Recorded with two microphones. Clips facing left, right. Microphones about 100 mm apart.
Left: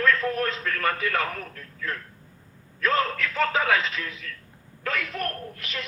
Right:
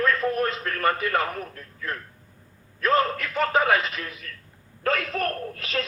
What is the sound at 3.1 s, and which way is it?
A man's voice, 20° right (ahead or behind).